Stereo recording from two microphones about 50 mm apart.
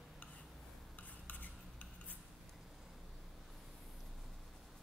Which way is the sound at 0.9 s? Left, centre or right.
Left.